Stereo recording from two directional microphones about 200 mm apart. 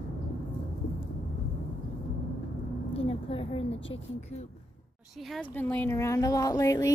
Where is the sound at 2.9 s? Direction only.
25° left (ahead or behind).